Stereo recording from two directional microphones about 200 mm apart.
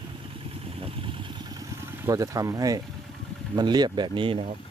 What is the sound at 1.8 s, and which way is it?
Speech, 15° right (ahead or behind).